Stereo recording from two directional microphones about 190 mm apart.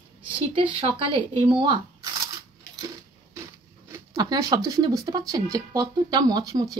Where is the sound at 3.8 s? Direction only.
20° right (ahead or behind).